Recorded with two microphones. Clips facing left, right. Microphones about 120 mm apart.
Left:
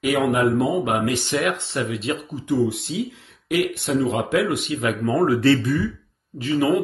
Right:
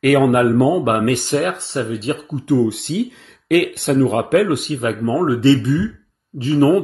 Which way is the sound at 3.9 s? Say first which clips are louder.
Right 7 dB; 60° right (ahead or behind).